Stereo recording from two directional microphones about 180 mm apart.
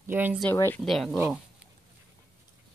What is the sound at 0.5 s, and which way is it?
Speech, 10° left (ahead or behind).